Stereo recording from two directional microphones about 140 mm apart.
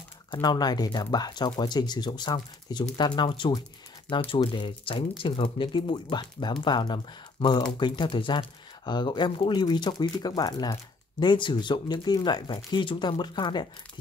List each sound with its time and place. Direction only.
0.3 s speech: 30° left (ahead or behind)